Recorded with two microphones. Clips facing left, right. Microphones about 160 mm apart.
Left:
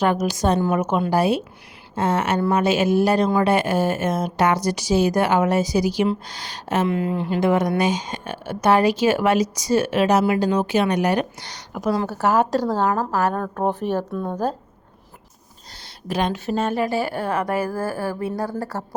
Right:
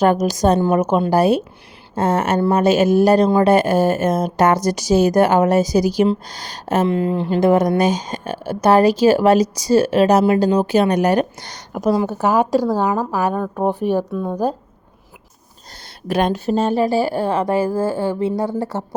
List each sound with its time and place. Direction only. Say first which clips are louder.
0.0 s speech: right 5 dB; 40° right (ahead or behind)
6.8 s speech: right 4 dB; 30° right (ahead or behind); by 11.9 s 45° right (ahead or behind)
11.9 s speech: right 1 dB; 15° right (ahead or behind)
16.0 s speech: right 5 dB; 60° right (ahead or behind)
16.3 s a woman's voice: right 5 dB; 35° right (ahead or behind)